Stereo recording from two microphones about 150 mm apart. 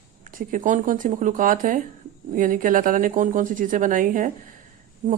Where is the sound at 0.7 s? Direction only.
60° right (ahead or behind).